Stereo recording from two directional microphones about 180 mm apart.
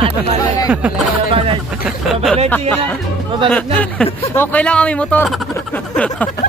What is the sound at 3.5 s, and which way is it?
Speech, 10° left (ahead or behind).